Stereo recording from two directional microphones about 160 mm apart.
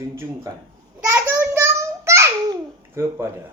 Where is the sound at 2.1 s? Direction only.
20° right (ahead or behind).